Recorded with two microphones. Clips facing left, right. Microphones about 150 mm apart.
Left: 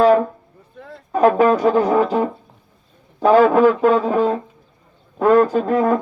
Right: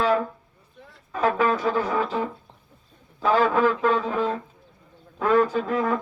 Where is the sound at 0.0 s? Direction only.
40° left (ahead or behind).